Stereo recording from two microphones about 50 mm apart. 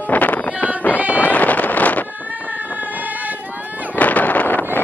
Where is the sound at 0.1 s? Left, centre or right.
Left.